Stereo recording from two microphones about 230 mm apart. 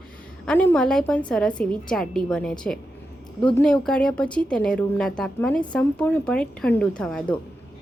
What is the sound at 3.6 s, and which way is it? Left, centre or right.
A woman's voice, centre.